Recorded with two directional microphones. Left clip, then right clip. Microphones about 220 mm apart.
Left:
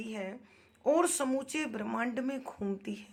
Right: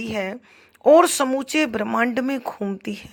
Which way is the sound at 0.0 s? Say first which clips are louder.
Right 13 dB; 40° right (ahead or behind).